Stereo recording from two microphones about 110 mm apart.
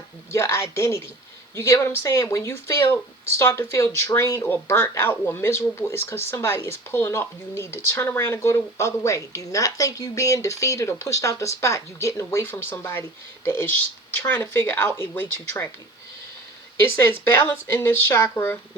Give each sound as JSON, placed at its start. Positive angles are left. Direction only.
{"t": 0.3, "sound": "speech", "side_deg": 25}
{"t": 16.8, "sound": "speech", "side_deg": 20}